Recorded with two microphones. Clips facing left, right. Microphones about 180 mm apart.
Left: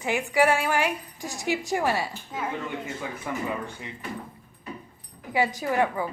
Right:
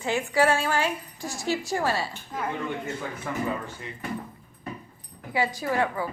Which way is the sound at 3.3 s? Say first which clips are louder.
Even; 10° left (ahead or behind).